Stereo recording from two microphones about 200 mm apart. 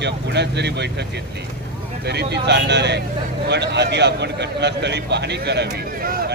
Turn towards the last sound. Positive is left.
turn(degrees=-45)  # may be behind; listen again after turning